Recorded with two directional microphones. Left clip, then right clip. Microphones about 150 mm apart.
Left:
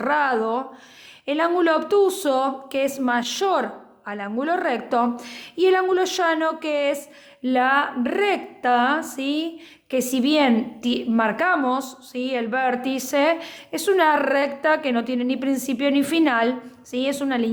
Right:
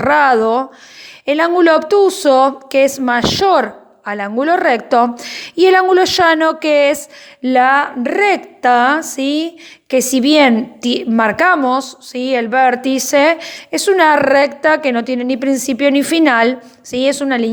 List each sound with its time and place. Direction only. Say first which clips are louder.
0.0 s a woman's voice: right 10 dB; 45° right (ahead or behind)